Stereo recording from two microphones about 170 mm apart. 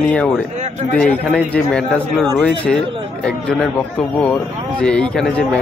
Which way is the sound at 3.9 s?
5° left (ahead or behind).